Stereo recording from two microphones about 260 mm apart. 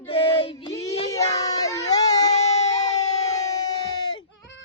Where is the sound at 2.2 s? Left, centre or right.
Left.